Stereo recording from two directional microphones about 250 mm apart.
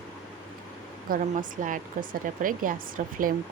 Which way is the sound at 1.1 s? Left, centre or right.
Right.